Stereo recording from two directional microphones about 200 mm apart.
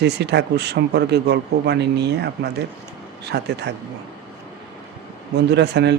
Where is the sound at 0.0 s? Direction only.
60° right (ahead or behind).